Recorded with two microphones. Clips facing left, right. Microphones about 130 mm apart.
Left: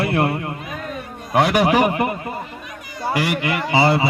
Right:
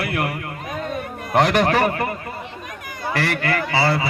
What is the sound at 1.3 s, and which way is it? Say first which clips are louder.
Speech: left 1 dB; 5° left (ahead or behind).